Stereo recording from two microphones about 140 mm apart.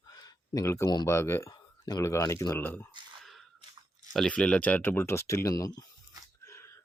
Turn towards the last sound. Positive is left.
turn(degrees=25)  # may be behind; listen again after turning